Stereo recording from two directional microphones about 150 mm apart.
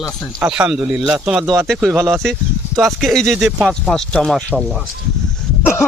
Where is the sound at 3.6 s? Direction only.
Centre (ahead or behind).